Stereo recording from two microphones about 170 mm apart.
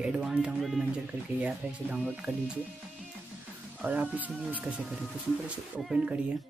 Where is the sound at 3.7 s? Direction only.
10° right (ahead or behind).